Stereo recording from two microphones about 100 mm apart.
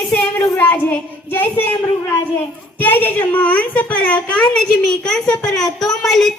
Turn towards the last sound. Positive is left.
turn(degrees=5)  # may be behind; listen again after turning